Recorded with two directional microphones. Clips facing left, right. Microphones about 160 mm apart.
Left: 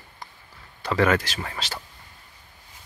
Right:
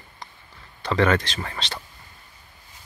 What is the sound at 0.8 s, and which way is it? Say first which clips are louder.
Speech: right 1 dB; 5° left (ahead or behind).